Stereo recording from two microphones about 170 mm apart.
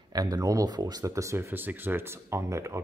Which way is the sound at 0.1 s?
20° right (ahead or behind).